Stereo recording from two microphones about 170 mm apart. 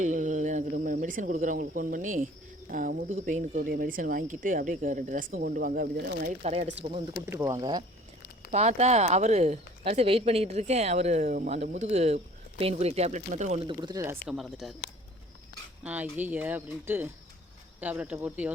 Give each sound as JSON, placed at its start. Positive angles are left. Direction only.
{"t": 0.0, "sound": "speech", "side_deg": -50}
{"t": 6.4, "sound": "speech", "side_deg": -40}
{"t": 7.3, "sound": "speech", "side_deg": -15}
{"t": 8.4, "sound": "speech", "side_deg": -40}
{"t": 13.7, "sound": "speech", "side_deg": -25}
{"t": 14.3, "sound": "speech", "side_deg": 0}
{"t": 15.8, "sound": "speech", "side_deg": -10}